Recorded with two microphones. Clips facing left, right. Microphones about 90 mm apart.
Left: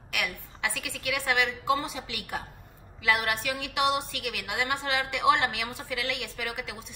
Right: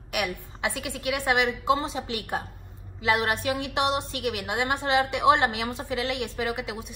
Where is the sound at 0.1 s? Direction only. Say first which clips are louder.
Right 4 dB; 20° right (ahead or behind).